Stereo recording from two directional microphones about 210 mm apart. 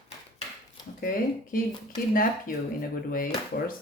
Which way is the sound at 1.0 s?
40° left (ahead or behind).